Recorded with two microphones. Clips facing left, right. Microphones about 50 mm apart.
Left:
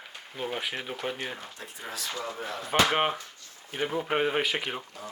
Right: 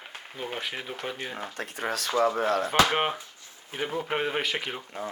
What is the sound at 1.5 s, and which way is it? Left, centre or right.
Speech, right.